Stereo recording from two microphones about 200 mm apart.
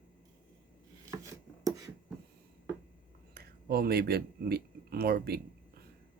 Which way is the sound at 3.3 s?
50° right (ahead or behind).